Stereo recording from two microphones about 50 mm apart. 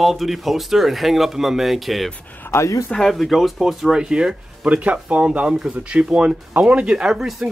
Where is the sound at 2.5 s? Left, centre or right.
Left.